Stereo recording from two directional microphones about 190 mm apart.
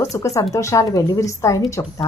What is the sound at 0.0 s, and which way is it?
Speech, 15° left (ahead or behind).